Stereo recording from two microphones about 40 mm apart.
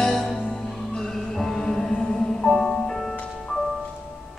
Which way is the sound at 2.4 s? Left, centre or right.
Centre.